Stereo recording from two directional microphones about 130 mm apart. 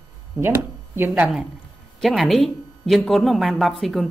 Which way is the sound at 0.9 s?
15° right (ahead or behind).